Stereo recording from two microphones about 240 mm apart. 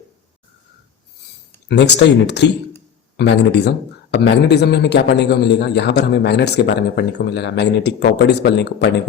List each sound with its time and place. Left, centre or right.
1.6 s speech: left